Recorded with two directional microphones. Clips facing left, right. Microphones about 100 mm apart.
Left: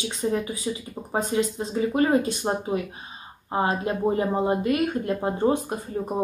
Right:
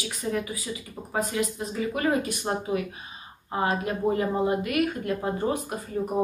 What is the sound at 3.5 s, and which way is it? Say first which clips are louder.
Speech: left 2 dB; 30° left (ahead or behind).